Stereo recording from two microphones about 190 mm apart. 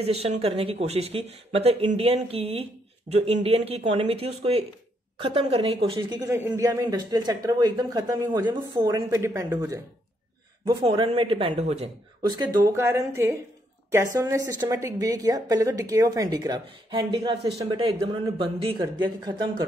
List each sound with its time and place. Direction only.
0.0 s speech: 30° right (ahead or behind)
12.3 s speech: 20° right (ahead or behind)